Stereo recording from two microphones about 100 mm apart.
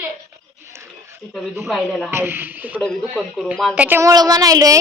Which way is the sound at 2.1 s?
20° right (ahead or behind).